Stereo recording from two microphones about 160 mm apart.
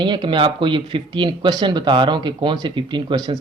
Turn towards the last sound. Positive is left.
turn(degrees=-25)  # may be behind; listen again after turning